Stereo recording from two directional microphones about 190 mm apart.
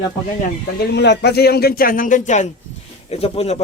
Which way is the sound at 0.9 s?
65° left (ahead or behind).